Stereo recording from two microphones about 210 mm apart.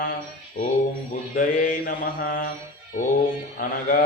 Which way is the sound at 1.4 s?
40° left (ahead or behind).